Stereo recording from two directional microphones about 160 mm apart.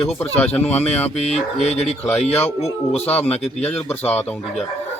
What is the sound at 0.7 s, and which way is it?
A man's voice, 40° left (ahead or behind).